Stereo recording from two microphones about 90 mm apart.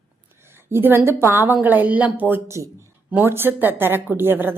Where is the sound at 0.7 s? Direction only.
25° right (ahead or behind).